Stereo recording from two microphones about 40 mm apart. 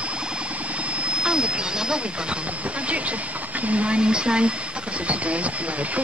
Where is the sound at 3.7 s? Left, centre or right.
Right.